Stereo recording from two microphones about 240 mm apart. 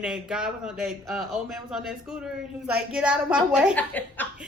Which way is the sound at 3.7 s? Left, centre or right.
Centre.